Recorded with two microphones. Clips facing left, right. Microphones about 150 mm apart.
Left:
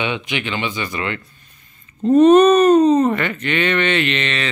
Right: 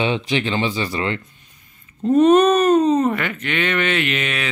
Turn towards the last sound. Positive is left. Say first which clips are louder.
# left 2 dB
turn(degrees=-5)  # may be behind; listen again after turning